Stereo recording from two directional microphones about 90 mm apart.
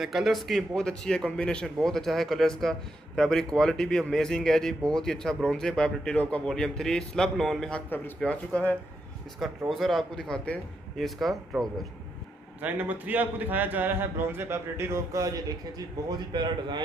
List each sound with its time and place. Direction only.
0.0 s a man's voice: 5° right (ahead or behind); by 8.7 s 15° left (ahead or behind)
9.7 s a man's voice: centre (ahead or behind)
12.6 s a man's voice: 20° right (ahead or behind); by 16.1 s 40° right (ahead or behind)
16.3 s a man's voice: 55° right (ahead or behind)